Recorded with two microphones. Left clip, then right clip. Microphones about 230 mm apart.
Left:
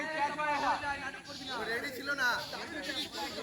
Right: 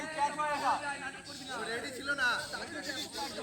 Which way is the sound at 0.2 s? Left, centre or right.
Right.